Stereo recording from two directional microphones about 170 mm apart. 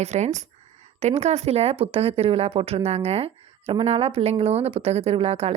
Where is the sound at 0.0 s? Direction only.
40° right (ahead or behind).